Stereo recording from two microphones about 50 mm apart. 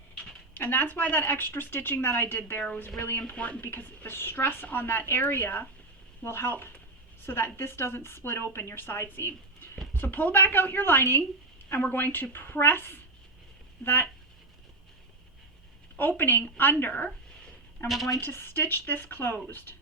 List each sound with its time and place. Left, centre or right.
0.5 s a woman's voice: left
3.3 s speech: left
3.6 s a woman's voice: left
6.2 s a woman's voice: left
16.0 s a woman's voice: left
17.8 s a woman's voice: centre
18.2 s speech: left